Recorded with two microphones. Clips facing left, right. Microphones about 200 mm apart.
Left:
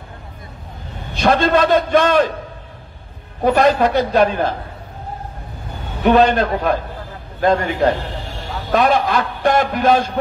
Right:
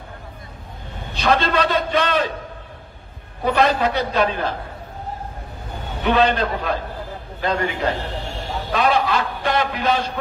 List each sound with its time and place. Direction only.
1.1 s a man's voice: 50° left (ahead or behind)
3.4 s a man's voice: 50° left (ahead or behind)
6.0 s a man's voice: 50° left (ahead or behind)